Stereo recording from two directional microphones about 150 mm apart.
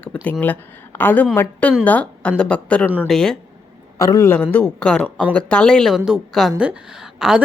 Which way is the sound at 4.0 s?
20° left (ahead or behind).